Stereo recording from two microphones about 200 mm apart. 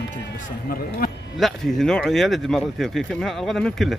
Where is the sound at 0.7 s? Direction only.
50° left (ahead or behind).